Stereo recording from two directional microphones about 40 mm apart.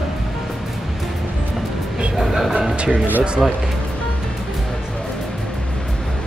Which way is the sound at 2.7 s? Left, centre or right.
Right.